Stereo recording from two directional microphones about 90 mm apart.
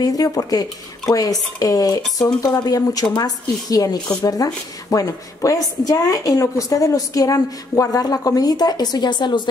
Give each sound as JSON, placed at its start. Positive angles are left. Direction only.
{"t": 0.0, "sound": "speech", "side_deg": 45}